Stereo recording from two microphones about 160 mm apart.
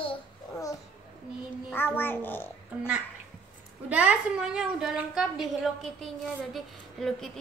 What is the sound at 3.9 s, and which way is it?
A woman's voice, 10° right (ahead or behind).